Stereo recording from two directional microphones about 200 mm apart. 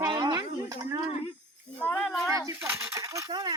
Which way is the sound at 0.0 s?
20° right (ahead or behind).